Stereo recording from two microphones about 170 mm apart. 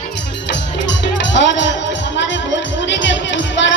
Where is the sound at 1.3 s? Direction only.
90° left.